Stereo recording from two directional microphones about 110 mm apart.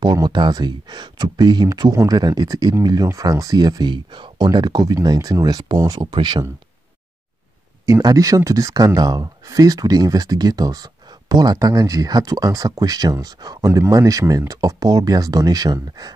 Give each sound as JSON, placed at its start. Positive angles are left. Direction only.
{"t": 0.0, "sound": "speech", "side_deg": -40}
{"t": 7.8, "sound": "speech", "side_deg": -30}